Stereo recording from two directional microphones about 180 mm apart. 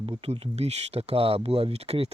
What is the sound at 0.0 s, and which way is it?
Speech, 30° right (ahead or behind).